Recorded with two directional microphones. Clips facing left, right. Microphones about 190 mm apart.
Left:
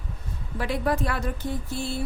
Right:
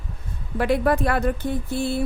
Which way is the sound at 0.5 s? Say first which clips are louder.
Right 6 dB; 60° right (ahead or behind).